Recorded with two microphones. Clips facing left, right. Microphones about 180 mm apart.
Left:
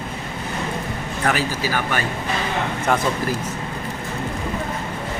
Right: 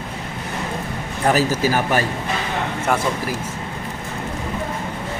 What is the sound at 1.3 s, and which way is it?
Speech, 40° right (ahead or behind).